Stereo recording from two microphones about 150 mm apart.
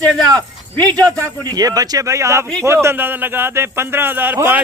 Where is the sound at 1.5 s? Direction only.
25° right (ahead or behind).